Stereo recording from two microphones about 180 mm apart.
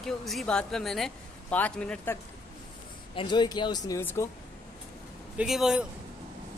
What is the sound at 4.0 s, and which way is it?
Speech, 10° left (ahead or behind).